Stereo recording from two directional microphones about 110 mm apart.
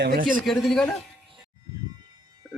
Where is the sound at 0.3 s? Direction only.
Centre (ahead or behind).